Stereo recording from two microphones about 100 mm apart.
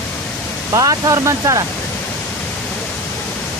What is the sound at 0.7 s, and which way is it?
Speech, 35° right (ahead or behind).